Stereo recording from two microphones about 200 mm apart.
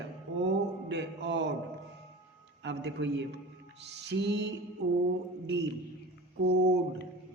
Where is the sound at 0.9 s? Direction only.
60° right (ahead or behind).